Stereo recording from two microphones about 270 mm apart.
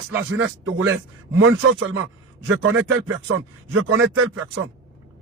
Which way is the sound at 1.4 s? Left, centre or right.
Right.